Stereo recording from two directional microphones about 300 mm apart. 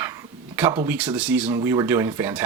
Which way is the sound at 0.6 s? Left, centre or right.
Centre.